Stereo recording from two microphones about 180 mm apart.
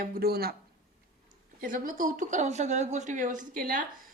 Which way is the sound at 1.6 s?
50° right (ahead or behind).